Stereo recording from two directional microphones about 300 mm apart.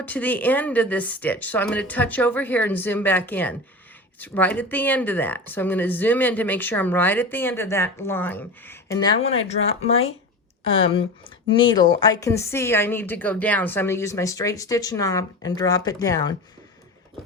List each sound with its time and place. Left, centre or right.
0.0 s speech: centre